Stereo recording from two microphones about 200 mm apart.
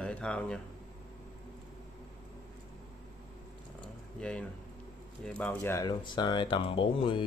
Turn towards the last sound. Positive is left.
turn(degrees=25)  # may be behind; listen again after turning